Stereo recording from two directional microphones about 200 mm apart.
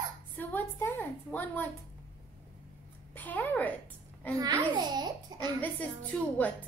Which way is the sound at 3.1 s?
10° left (ahead or behind).